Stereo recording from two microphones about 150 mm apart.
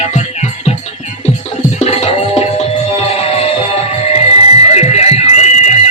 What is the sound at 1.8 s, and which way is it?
Music, 45° left (ahead or behind).